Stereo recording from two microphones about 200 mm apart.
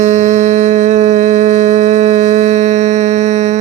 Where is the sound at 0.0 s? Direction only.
35° right (ahead or behind).